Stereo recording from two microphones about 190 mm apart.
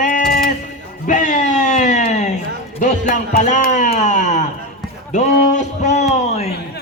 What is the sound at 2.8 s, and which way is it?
Music, 40° left (ahead or behind).